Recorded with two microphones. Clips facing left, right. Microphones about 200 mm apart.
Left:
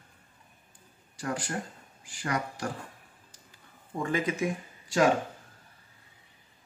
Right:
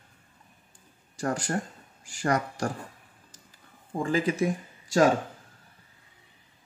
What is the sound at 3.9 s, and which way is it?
Speech, 30° right (ahead or behind).